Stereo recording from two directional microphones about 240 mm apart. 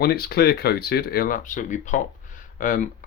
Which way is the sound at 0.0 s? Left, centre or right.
Left.